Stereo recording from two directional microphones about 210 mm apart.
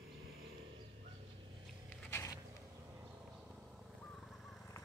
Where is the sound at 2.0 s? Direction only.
10° left (ahead or behind).